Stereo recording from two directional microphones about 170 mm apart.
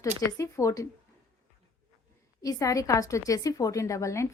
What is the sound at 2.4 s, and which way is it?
A woman's voice, 20° left (ahead or behind).